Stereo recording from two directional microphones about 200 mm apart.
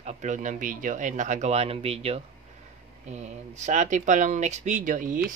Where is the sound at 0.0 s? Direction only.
35° right (ahead or behind).